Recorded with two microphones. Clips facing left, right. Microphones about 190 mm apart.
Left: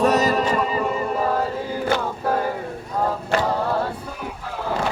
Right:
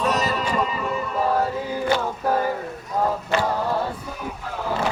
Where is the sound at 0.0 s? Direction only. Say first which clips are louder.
Left 5 dB; 45° left (ahead or behind).